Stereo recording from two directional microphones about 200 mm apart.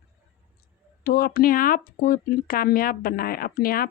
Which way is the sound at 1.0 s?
50° left (ahead or behind).